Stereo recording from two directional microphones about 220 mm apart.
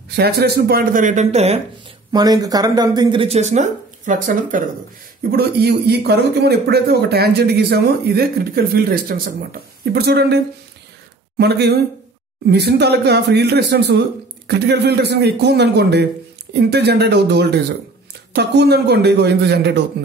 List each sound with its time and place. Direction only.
0.1 s speech: 45° right (ahead or behind); by 1.6 s 30° right (ahead or behind)
2.1 s speech: 15° right (ahead or behind); by 19.8 s 50° right (ahead or behind)